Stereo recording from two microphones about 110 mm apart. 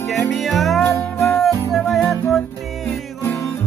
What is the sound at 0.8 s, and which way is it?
Music, 25° left (ahead or behind).